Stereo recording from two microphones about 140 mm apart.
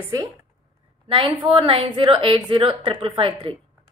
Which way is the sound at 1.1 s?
35° right (ahead or behind).